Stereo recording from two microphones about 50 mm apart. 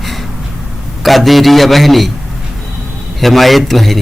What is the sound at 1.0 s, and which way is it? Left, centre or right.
Speech, centre.